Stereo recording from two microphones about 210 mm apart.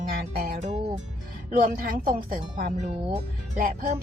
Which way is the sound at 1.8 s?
40° right (ahead or behind).